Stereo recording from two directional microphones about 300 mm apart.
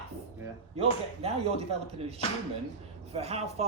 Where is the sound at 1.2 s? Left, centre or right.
Centre.